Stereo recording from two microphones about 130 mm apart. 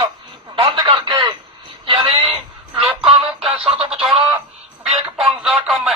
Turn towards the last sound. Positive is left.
turn(degrees=-5)  # may be behind; listen again after turning